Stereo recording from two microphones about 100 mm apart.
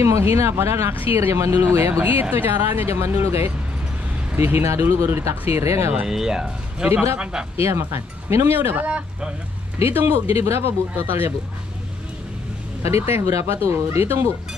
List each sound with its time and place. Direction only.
0.0 s speech: 30° right (ahead or behind)
5.9 s speech: 5° right (ahead or behind)
6.9 s speech: 25° right (ahead or behind)
12.8 s speech: 25° right (ahead or behind)